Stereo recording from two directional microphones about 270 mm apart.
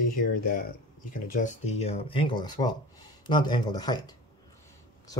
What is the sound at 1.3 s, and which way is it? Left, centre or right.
Speech, left.